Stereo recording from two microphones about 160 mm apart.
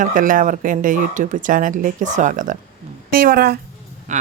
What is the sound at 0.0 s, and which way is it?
Speech, 55° right (ahead or behind).